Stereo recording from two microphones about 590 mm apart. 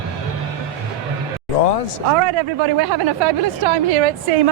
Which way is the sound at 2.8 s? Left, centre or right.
Right.